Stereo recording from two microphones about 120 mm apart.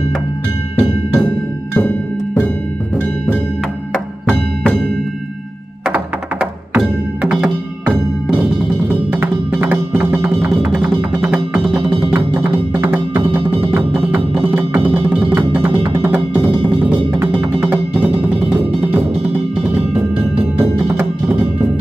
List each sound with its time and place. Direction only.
0.7 s music: 5° left (ahead or behind)
6.7 s music: 5° right (ahead or behind)